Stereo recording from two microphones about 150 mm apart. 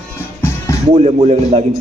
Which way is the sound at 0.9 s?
45° right (ahead or behind).